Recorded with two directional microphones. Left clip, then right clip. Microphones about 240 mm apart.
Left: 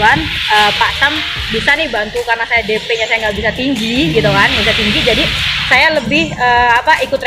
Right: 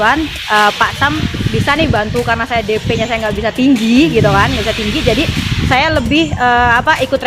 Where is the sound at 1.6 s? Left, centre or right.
Right.